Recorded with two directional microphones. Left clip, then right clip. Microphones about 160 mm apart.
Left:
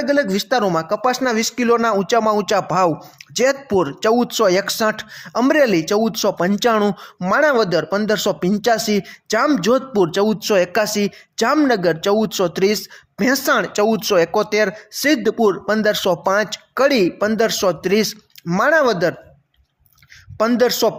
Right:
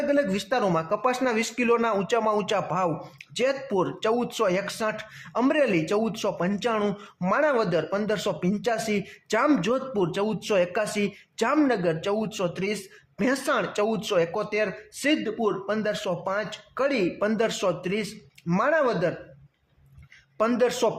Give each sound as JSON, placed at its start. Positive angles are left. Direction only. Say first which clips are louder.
{"t": 0.0, "sound": "a man's voice", "louder": "left 6 dB", "side_deg": 30}
{"t": 9.6, "sound": "a man's voice", "louder": "left 9 dB", "side_deg": 45}
{"t": 15.2, "sound": "speech", "louder": "left 10 dB", "side_deg": 55}
{"t": 18.4, "sound": "speech", "louder": "left 8 dB", "side_deg": 25}
{"t": 18.7, "sound": "a man's voice", "louder": "left 8 dB", "side_deg": 40}
{"t": 20.4, "sound": "speech", "louder": "left 7 dB", "side_deg": 30}